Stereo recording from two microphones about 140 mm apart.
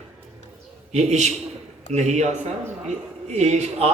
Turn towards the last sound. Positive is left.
turn(degrees=-50)  # may be behind; listen again after turning